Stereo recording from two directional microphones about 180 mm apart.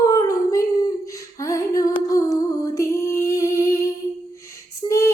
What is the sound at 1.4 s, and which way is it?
Music, 20° left (ahead or behind).